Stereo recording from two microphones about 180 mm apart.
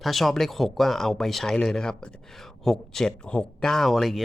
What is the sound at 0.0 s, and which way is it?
Speech, centre (ahead or behind).